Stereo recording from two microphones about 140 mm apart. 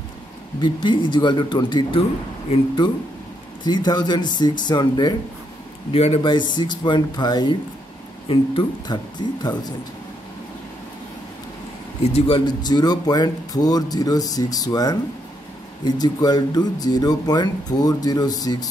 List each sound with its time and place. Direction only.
0.6 s speech: 35° left (ahead or behind)
5.9 s speech: 45° left (ahead or behind); by 9.8 s 30° left (ahead or behind)
12.0 s speech: 45° left (ahead or behind); by 18.7 s 25° left (ahead or behind)